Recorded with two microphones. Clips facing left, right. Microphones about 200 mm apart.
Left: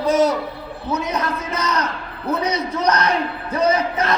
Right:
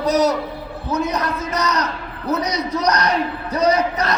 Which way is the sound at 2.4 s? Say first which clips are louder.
Left 2 dB; 35° right (ahead or behind).